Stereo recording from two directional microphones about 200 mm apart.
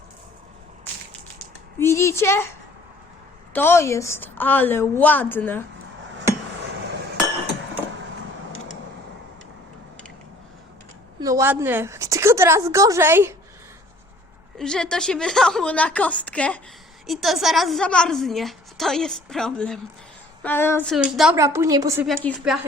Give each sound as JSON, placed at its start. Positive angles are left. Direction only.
{"t": 1.8, "sound": "a woman's voice", "side_deg": 15}
{"t": 3.5, "sound": "a woman's voice", "side_deg": 10}
{"t": 6.1, "sound": "a sound", "side_deg": -60}
{"t": 11.2, "sound": "a woman's voice", "side_deg": -15}
{"t": 14.6, "sound": "a woman's voice", "side_deg": 5}
{"t": 20.9, "sound": "a woman's voice", "side_deg": -5}
{"t": 21.3, "sound": "a woman's voice", "side_deg": -15}
{"t": 22.0, "sound": "a woman's voice", "side_deg": 5}